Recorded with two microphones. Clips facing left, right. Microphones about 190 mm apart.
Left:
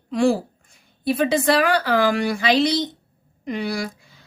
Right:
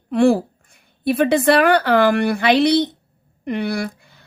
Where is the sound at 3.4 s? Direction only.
60° right (ahead or behind).